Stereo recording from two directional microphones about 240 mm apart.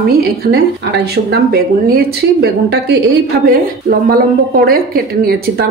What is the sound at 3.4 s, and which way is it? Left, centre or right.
Speech, right.